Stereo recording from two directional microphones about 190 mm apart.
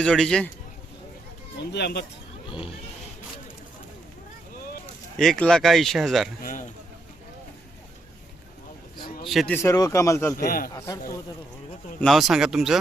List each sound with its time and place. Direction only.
0.0 s speech: 5° left (ahead or behind)
1.5 s speech: 60° left (ahead or behind)
5.1 s speech: 5° left (ahead or behind)
6.4 s a man's voice: 45° left (ahead or behind)
9.2 s speech: centre (ahead or behind)
9.6 s speech: 15° left (ahead or behind)
11.9 s speech: centre (ahead or behind)